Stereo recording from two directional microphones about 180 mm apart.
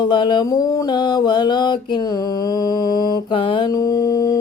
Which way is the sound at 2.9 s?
25° left (ahead or behind).